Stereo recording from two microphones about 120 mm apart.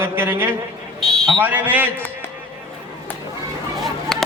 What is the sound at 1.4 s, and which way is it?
Speech, 15° right (ahead or behind).